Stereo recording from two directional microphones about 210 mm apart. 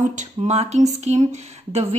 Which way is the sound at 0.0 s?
35° right (ahead or behind).